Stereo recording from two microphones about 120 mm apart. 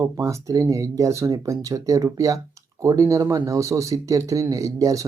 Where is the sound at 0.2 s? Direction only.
25° right (ahead or behind).